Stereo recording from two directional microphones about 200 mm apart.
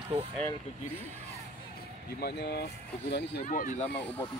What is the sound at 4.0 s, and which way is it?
Speech, 10° left (ahead or behind).